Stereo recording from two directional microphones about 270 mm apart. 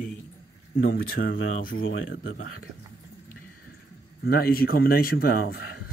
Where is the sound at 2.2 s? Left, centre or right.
Left.